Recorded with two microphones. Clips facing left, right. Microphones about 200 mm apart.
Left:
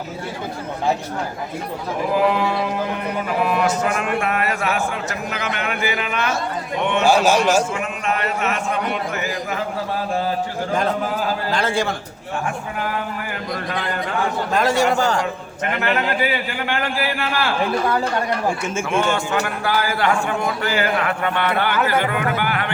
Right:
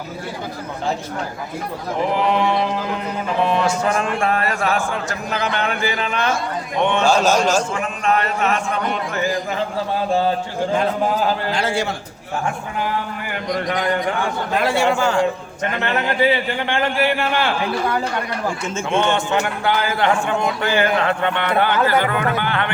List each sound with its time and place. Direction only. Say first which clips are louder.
2.1 s a man's voice: left 1 dB; 25° right (ahead or behind)
7.0 s a man's voice: left 2 dB; 15° left (ahead or behind)
7.7 s speech: right 3 dB; 35° right (ahead or behind)
11.5 s a man's voice: left 1 dB; 50° left (ahead or behind)
14.5 s a man's voice: even; 40° left (ahead or behind)
15.8 s a man's voice: right 2 dB; 25° right (ahead or behind)
19.0 s a man's voice: right 2 dB; 25° right (ahead or behind)